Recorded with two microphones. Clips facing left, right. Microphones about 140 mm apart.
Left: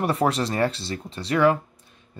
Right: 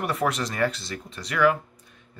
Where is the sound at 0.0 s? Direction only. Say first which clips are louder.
Left 4 dB; 30° left (ahead or behind).